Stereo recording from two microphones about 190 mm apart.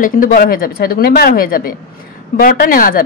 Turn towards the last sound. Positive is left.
turn(degrees=50)  # may be behind; listen again after turning